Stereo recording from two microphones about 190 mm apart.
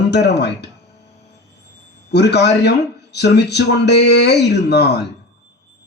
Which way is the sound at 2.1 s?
60° left (ahead or behind).